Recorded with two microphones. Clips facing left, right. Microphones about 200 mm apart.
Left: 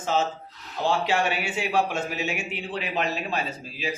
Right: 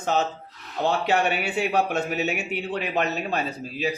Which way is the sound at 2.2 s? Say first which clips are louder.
Right 3 dB; 40° right (ahead or behind).